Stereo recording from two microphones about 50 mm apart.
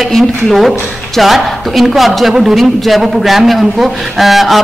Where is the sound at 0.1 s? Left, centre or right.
Centre.